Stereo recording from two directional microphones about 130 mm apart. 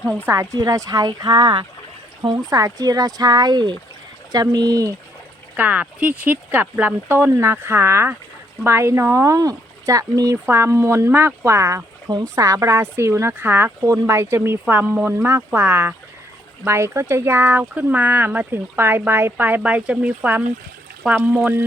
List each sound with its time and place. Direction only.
0.0 s speech: 15° right (ahead or behind)
0.3 s speech: 25° right (ahead or behind)
5.5 s speech: 10° right (ahead or behind)